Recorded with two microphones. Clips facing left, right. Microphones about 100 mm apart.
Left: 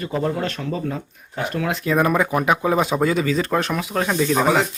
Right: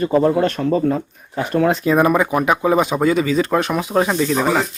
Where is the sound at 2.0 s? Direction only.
5° right (ahead or behind).